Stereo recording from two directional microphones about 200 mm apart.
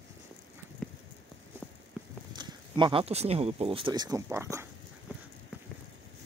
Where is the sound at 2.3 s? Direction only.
20° right (ahead or behind).